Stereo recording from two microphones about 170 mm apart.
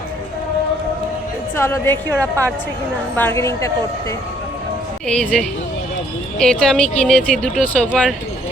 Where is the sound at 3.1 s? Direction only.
15° left (ahead or behind).